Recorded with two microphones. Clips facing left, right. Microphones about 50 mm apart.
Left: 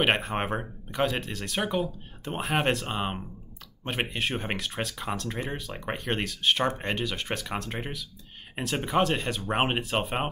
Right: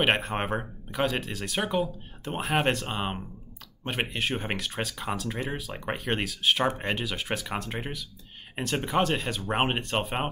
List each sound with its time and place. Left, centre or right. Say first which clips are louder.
0.0 s speech: even; centre